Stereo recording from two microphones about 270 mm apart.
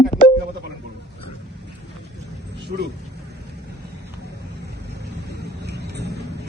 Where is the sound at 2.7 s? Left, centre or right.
Right.